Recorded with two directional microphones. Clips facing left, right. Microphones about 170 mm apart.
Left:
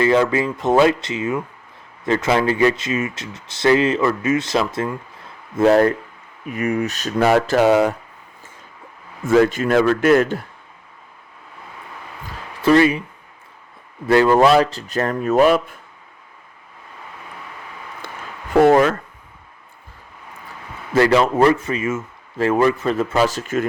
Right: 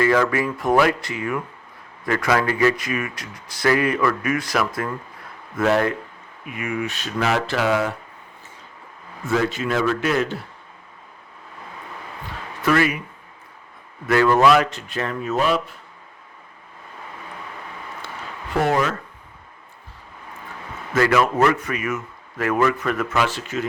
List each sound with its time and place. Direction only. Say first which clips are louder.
0.0 s speech: left 2 dB; 20° left (ahead or behind)
5.5 s a man's voice: left 6 dB; 35° left (ahead or behind)
9.2 s a man's voice: left 7 dB; 50° left (ahead or behind)
12.6 s speech: left 6 dB; 30° left (ahead or behind)
14.1 s speech: left 3 dB; 30° left (ahead or behind); by 15.7 s 50° left (ahead or behind)
18.0 s a sound: left 1 dB; 50° left (ahead or behind)
18.6 s a man's voice: left 8 dB; 50° left (ahead or behind)
20.9 s speech: left 3 dB; 30° left (ahead or behind); by 23.6 s 45° left (ahead or behind)